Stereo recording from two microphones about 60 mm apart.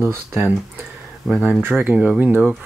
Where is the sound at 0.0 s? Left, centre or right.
Right.